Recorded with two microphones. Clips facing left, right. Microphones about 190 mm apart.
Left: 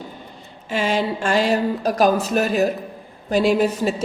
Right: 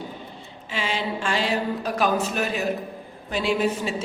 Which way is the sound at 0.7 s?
45° left (ahead or behind).